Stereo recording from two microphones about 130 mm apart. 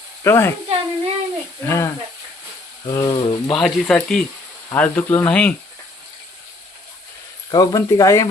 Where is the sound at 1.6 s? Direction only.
20° left (ahead or behind).